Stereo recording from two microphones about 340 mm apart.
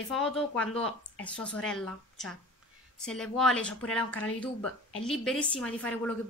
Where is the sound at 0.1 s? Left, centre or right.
Centre.